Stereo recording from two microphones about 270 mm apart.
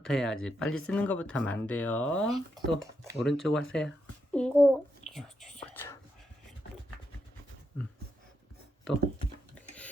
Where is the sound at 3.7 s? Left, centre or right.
Centre.